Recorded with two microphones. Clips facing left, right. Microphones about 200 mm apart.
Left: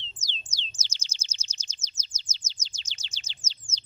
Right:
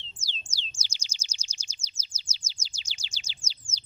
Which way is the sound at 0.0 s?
10° right (ahead or behind).